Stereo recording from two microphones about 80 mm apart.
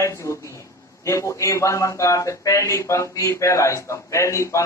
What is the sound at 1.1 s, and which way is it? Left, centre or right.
A man's voice, left.